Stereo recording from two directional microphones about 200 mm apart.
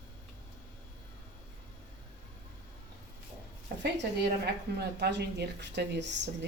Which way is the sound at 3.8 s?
55° right (ahead or behind).